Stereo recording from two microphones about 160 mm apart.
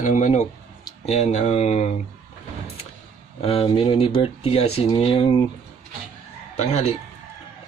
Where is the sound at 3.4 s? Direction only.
35° left (ahead or behind).